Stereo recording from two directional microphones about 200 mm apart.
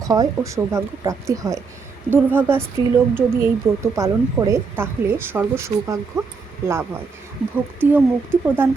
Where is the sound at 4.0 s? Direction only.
15° right (ahead or behind).